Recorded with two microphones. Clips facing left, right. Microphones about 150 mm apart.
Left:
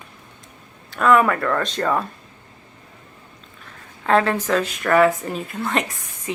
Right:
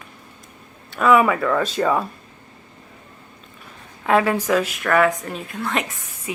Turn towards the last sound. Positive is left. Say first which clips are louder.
# left 2 dB
turn(degrees=-10)  # may be behind; listen again after turning